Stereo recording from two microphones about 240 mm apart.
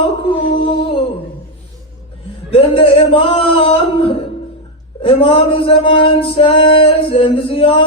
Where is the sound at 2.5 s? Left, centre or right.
Left.